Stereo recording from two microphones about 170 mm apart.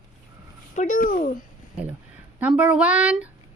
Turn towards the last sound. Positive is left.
turn(degrees=-10)  # may be behind; listen again after turning